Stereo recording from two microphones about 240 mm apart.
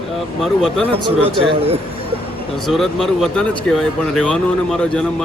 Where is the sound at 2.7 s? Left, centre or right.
Centre.